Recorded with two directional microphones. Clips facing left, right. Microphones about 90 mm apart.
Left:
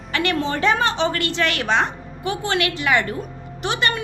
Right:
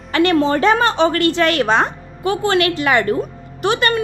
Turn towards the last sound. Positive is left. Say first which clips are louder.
# right 5 dB
turn(degrees=-50)  # may be behind; listen again after turning